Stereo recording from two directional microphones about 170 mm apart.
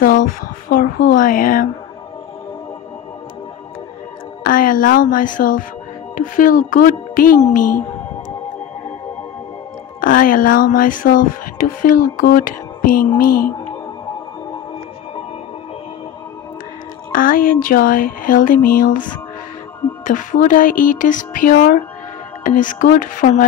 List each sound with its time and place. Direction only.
0.0 s speech: 55° left (ahead or behind)
4.4 s speech: 55° left (ahead or behind)
9.9 s speech: 50° left (ahead or behind)
17.1 s speech: 55° left (ahead or behind)
20.1 s speech: 50° left (ahead or behind)